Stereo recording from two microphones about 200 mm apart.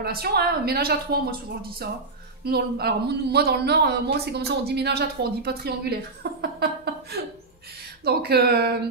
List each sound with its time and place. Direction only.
0.0 s speech: 50° right (ahead or behind)
6.4 s chuckle: 55° right (ahead or behind)
8.0 s speech: 50° right (ahead or behind)